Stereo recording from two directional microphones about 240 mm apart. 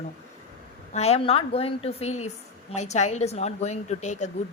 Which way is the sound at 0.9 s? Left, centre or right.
Left.